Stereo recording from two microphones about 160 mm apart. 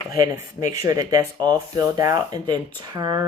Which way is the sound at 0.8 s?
25° right (ahead or behind).